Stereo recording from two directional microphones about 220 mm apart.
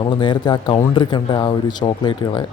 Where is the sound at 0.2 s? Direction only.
20° left (ahead or behind).